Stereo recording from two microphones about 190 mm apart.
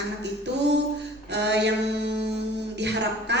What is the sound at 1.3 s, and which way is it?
Mantra, 65° right (ahead or behind).